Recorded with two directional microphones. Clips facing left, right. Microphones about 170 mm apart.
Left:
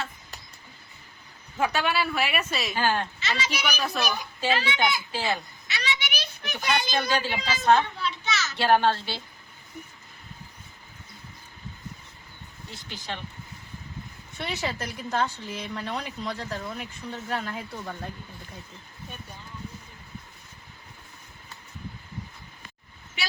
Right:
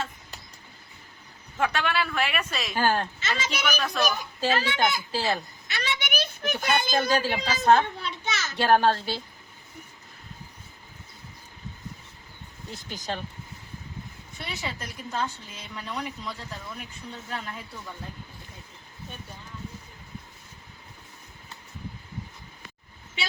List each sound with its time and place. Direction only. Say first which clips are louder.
1.5 s a woman's voice: left 1 dB; 5° left (ahead or behind)
2.7 s a woman's voice: right 2 dB; 45° right (ahead or behind)
3.8 s a woman's voice: right 3 dB; 5° left (ahead or behind)
4.2 s a child's voice: right 1 dB; 45° right (ahead or behind)
12.7 s speech: right 3 dB; 40° right (ahead or behind)
14.3 s a woman's voice: left 5 dB; 70° left (ahead or behind)